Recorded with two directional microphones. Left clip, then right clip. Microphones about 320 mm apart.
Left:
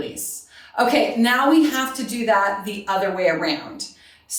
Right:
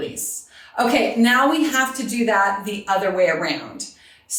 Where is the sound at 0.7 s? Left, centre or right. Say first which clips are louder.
Even; centre.